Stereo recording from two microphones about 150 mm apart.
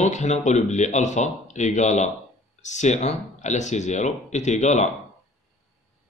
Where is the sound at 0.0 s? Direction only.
50° left (ahead or behind).